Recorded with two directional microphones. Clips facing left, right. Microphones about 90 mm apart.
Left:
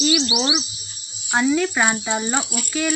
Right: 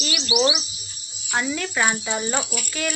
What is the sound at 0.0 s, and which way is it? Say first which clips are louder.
Speech: left 2 dB; 20° left (ahead or behind).